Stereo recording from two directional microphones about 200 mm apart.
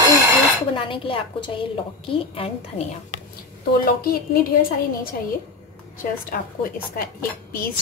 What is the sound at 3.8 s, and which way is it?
Speech, 45° left (ahead or behind).